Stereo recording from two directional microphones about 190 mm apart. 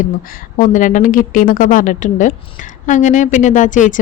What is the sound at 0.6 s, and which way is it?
A woman's voice, 45° left (ahead or behind).